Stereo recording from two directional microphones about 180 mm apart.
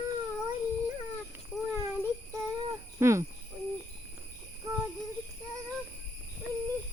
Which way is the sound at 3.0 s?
15° right (ahead or behind).